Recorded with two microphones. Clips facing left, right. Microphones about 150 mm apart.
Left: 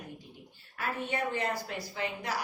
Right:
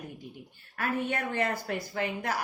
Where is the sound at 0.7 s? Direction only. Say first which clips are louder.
Right 3 dB; 55° right (ahead or behind).